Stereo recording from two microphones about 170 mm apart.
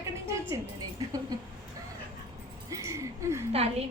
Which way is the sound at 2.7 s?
20° right (ahead or behind).